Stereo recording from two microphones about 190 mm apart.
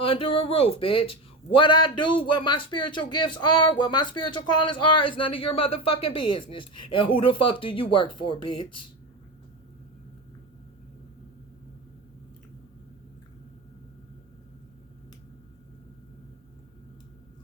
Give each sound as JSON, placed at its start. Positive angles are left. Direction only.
{"t": 0.0, "sound": "speech", "side_deg": 30}